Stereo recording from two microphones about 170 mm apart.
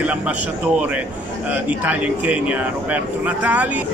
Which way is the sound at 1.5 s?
10° right (ahead or behind).